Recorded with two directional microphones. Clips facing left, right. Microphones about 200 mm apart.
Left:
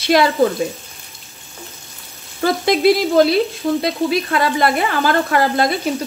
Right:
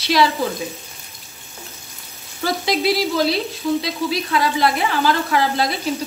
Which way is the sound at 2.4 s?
50° left (ahead or behind).